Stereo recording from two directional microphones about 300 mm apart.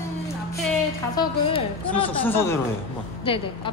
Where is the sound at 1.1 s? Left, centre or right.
Centre.